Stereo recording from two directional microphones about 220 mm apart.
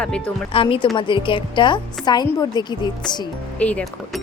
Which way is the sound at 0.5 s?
25° left (ahead or behind).